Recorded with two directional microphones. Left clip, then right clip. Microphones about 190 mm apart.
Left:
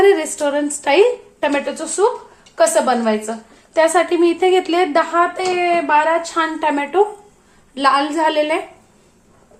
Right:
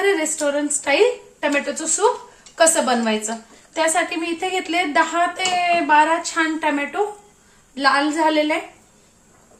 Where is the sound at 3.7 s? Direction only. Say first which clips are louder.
Left 6 dB; 35° left (ahead or behind).